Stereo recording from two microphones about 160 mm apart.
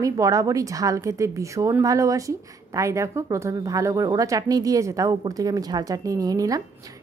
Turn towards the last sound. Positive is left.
turn(degrees=-20)  # may be behind; listen again after turning